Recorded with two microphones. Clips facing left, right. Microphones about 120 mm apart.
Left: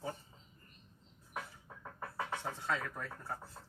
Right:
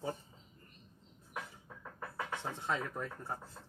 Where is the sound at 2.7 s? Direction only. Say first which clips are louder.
Right 2 dB; 20° right (ahead or behind).